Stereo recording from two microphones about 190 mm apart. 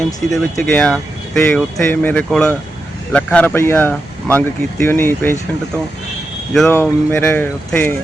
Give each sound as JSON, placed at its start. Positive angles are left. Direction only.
{"t": 0.2, "sound": "speech", "side_deg": 10}
{"t": 6.5, "sound": "speech", "side_deg": 0}